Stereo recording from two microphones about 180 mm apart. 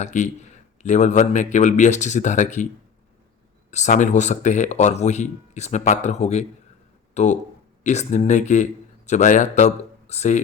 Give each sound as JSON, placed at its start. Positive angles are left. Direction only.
{"t": 0.0, "sound": "speech", "side_deg": 40}
{"t": 3.7, "sound": "a man's voice", "side_deg": 40}